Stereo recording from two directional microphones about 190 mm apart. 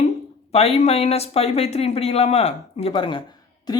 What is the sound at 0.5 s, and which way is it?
Speech, 35° left (ahead or behind).